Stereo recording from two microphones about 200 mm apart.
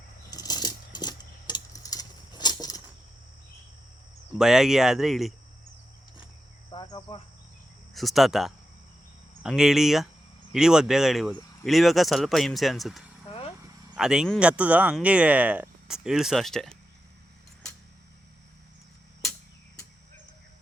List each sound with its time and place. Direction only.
0.3 s a sound: 20° left (ahead or behind)
4.4 s speech: centre (ahead or behind)
6.7 s cricket: 20° left (ahead or behind)
7.9 s speech: centre (ahead or behind)